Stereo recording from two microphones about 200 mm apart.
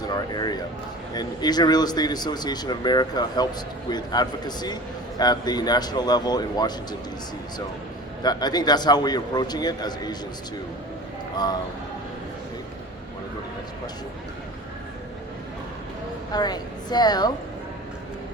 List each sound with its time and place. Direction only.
0.1 s speech: 20° left (ahead or behind)
8.2 s speech: 20° left (ahead or behind)
16.3 s speech: 20° left (ahead or behind)